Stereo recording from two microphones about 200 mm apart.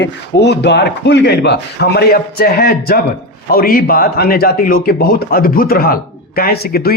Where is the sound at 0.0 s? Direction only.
55° left (ahead or behind).